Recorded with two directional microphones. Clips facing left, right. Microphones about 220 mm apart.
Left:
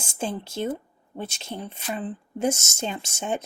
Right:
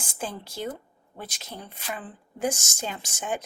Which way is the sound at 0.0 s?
25° left (ahead or behind).